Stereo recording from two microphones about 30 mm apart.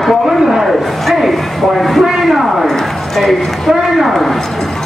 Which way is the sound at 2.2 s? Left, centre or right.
Centre.